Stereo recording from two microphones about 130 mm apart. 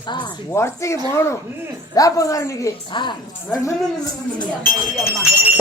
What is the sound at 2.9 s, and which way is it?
Speech, 35° left (ahead or behind).